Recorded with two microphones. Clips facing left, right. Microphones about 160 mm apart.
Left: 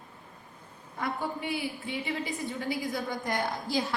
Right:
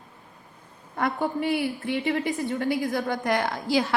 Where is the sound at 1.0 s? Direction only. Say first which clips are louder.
Right 7 dB; 70° right (ahead or behind).